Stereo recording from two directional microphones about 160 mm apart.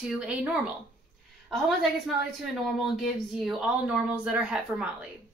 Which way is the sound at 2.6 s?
Centre (ahead or behind).